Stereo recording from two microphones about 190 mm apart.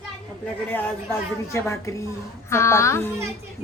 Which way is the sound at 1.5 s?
15° left (ahead or behind).